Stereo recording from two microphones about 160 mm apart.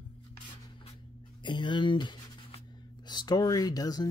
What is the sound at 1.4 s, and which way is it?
Writing, 30° left (ahead or behind).